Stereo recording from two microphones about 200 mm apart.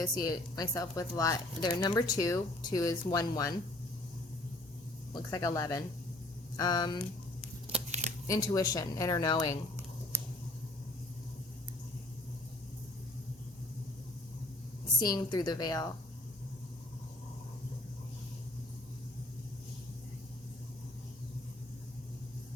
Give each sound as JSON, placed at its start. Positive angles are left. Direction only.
{"t": 0.0, "sound": "speech", "side_deg": 20}
{"t": 5.1, "sound": "speech", "side_deg": 20}
{"t": 7.7, "sound": "crumpling", "side_deg": -35}
{"t": 8.3, "sound": "speech", "side_deg": 20}
{"t": 10.1, "sound": "a sound", "side_deg": -15}
{"t": 15.1, "sound": "speech", "side_deg": 20}